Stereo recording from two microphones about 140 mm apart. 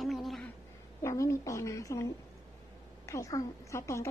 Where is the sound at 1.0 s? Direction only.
20° left (ahead or behind).